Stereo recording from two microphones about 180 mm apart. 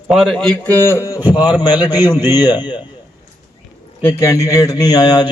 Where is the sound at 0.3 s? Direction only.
5° left (ahead or behind); by 2.8 s 25° left (ahead or behind).